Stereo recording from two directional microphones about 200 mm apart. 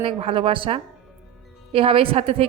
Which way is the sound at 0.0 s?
25° right (ahead or behind).